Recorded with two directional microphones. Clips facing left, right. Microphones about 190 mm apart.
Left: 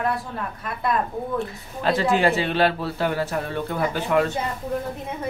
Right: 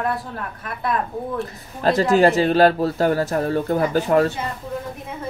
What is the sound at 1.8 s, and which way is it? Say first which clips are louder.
Speech: right 4 dB; 40° right (ahead or behind).